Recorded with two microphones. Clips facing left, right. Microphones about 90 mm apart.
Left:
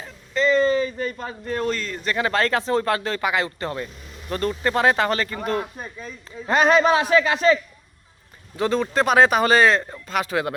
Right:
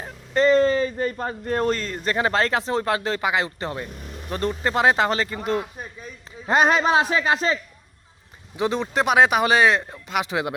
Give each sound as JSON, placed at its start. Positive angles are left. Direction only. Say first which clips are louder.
{"t": 0.0, "sound": "speech", "louder": "right 3 dB", "side_deg": -50}
{"t": 8.5, "sound": "speech", "louder": "left 2 dB", "side_deg": -15}